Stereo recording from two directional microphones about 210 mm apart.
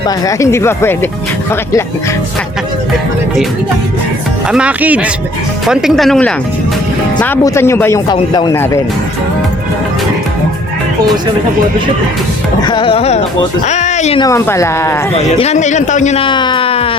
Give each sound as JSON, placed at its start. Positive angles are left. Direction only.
{"t": 0.3, "sound": "speech", "side_deg": 15}
{"t": 4.5, "sound": "speech", "side_deg": -5}
{"t": 12.6, "sound": "speech", "side_deg": 25}
{"t": 13.7, "sound": "music", "side_deg": 35}
{"t": 14.2, "sound": "speech", "side_deg": 15}
{"t": 15.4, "sound": "speech", "side_deg": 35}